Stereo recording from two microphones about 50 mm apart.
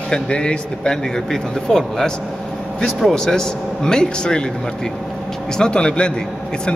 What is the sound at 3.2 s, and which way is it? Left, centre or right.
Speech, centre.